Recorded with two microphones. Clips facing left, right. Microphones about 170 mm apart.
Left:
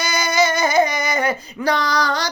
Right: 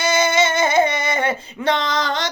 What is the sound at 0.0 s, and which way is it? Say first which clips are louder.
Female singing: right 2 dB; 25° right (ahead or behind).